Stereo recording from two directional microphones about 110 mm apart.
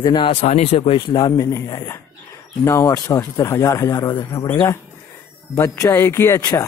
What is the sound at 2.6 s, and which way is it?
A man's voice, 25° left (ahead or behind).